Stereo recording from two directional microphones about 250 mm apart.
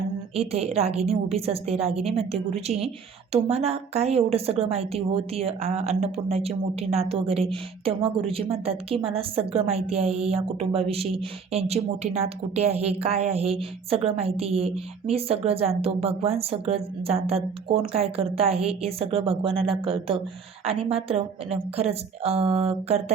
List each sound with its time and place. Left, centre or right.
0.3 s a woman's voice: right